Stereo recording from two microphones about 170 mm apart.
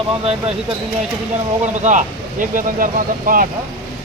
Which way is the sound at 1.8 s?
50° right (ahead or behind).